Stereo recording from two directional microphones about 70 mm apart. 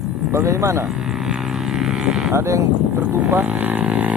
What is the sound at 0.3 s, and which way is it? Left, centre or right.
Speech, right.